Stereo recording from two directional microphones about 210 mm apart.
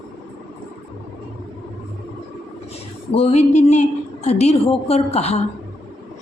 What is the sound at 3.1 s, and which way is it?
Speech, 30° left (ahead or behind).